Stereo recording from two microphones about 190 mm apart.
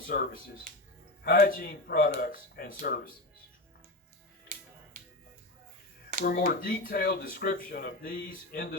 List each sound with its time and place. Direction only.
0.1 s speech: 50° left (ahead or behind)
6.2 s speech: 50° left (ahead or behind)